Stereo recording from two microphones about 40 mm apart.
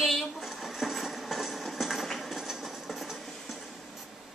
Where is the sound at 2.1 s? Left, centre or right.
Centre.